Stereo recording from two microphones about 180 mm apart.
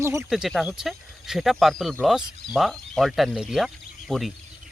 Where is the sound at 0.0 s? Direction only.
15° right (ahead or behind).